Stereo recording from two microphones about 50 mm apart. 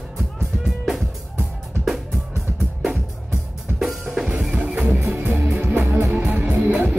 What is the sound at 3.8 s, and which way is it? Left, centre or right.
Drum kit, centre.